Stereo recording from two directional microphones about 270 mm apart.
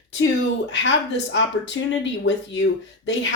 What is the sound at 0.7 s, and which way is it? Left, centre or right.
Speech, left.